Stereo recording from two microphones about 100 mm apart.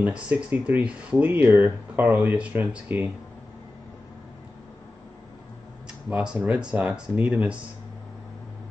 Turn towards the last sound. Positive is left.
turn(degrees=-10)  # may be behind; listen again after turning